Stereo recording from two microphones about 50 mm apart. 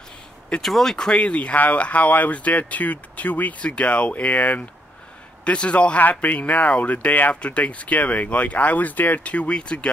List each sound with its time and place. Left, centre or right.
0.6 s speech: centre
0.9 s speech: centre